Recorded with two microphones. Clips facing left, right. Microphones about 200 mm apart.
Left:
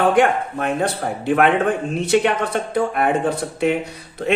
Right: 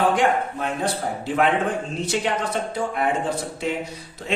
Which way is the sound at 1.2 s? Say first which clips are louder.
Left 5 dB; 60° left (ahead or behind).